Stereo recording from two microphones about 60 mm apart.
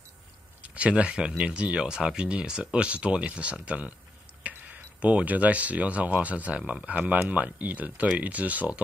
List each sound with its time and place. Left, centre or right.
0.6 s speech: right